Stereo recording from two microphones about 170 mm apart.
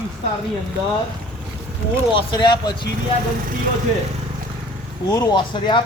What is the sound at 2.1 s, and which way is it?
Speech, 25° left (ahead or behind).